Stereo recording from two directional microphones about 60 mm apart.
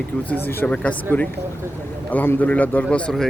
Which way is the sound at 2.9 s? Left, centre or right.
Centre.